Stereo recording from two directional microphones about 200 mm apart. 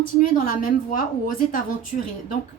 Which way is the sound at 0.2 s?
40° left (ahead or behind).